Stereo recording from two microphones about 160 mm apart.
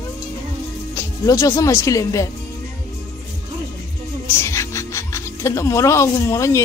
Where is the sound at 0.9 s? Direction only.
20° left (ahead or behind).